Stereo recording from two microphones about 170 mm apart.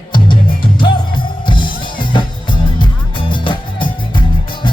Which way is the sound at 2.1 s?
30° left (ahead or behind).